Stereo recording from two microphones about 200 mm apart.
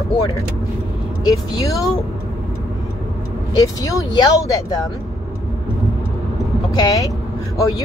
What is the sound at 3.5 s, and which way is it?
Speech, 15° left (ahead or behind).